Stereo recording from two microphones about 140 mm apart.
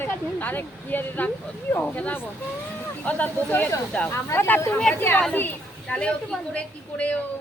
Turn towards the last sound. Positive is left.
turn(degrees=10)  # may be behind; listen again after turning